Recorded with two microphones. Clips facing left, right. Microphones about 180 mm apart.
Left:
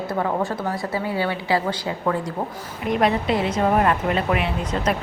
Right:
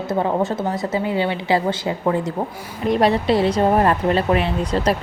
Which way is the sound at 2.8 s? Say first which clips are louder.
Right 4 dB; 35° right (ahead or behind).